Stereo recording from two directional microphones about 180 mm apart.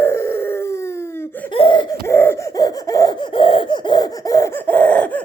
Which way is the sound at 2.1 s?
15° left (ahead or behind).